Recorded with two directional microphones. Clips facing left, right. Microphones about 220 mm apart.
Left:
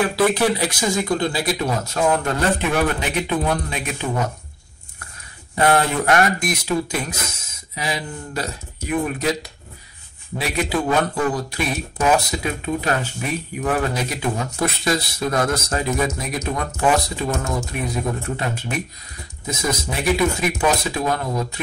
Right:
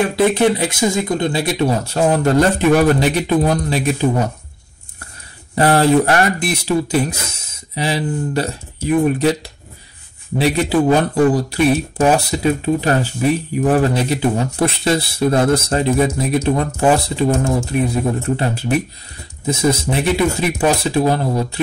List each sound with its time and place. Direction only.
0.0 s speech: 25° right (ahead or behind)
5.6 s speech: 35° right (ahead or behind)